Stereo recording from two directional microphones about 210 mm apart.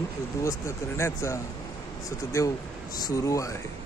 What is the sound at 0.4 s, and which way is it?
Speech, 15° left (ahead or behind).